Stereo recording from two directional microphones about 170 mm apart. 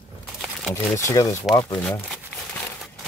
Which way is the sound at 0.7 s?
15° left (ahead or behind).